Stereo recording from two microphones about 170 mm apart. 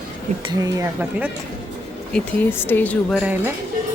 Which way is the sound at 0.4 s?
20° right (ahead or behind).